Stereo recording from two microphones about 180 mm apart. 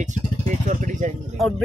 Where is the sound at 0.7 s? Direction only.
45° right (ahead or behind).